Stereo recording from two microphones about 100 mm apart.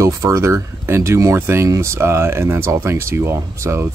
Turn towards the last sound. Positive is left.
turn(degrees=-25)  # may be behind; listen again after turning